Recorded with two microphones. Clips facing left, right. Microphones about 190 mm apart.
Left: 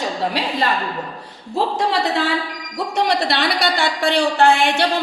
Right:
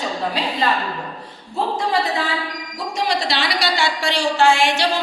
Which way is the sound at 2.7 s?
65° left (ahead or behind).